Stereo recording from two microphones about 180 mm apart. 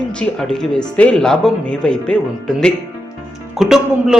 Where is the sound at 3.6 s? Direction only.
Centre (ahead or behind).